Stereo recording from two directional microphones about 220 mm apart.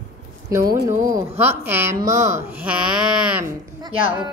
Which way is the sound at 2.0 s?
35° right (ahead or behind).